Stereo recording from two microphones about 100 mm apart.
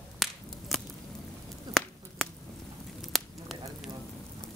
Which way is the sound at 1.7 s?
5° left (ahead or behind).